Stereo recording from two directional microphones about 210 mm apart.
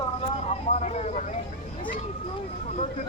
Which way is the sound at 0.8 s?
30° left (ahead or behind).